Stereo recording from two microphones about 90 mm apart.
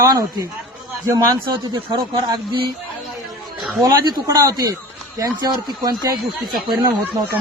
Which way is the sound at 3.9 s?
45° right (ahead or behind).